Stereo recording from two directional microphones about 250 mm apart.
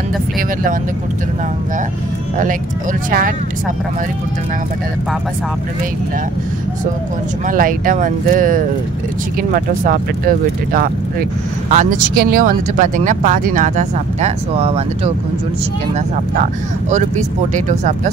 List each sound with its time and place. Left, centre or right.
3.1 s speech: right
7.4 s speech: right